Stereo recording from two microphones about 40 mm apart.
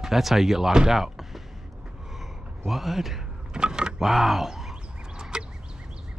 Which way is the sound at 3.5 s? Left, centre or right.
Right.